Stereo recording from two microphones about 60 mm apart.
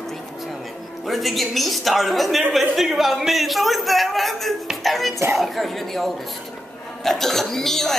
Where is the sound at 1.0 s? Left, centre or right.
Centre.